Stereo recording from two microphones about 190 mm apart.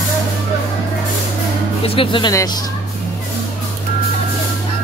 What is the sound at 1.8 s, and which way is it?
Speech, 30° left (ahead or behind).